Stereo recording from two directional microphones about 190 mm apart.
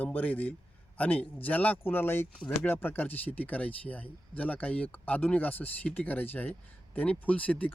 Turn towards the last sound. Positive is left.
turn(degrees=5)  # may be behind; listen again after turning